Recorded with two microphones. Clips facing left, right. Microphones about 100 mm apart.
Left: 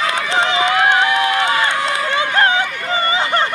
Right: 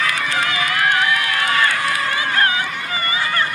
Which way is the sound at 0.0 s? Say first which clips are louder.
Left 3 dB; 25° left (ahead or behind).